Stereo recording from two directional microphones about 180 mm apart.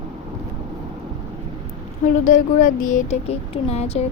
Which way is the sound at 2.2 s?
45° left (ahead or behind).